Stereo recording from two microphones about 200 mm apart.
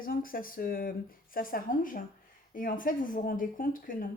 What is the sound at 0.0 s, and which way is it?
Speech, 45° left (ahead or behind).